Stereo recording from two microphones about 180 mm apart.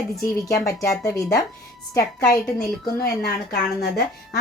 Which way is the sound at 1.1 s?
20° left (ahead or behind).